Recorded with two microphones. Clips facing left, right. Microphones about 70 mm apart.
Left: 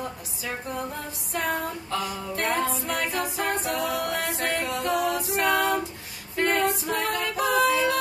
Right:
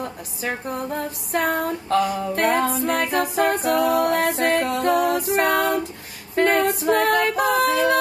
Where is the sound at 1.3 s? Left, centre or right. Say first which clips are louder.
Right 6 dB; right.